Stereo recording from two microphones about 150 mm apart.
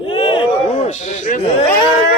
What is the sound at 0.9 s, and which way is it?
Speech, 50° left (ahead or behind).